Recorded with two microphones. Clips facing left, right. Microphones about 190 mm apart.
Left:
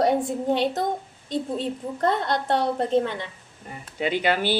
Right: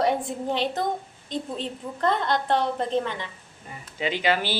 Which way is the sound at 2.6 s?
40° left (ahead or behind).